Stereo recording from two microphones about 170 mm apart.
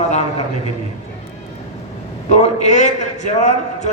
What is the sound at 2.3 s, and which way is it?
A man's voice, 40° left (ahead or behind).